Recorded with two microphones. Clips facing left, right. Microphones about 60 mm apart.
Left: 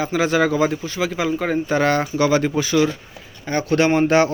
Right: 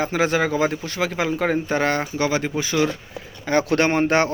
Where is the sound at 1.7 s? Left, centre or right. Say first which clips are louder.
Left 3 dB; right.